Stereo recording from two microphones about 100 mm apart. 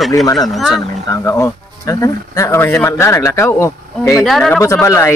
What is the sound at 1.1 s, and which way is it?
Speech, 30° left (ahead or behind).